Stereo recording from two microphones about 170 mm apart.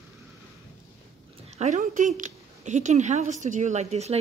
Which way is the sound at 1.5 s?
45° right (ahead or behind).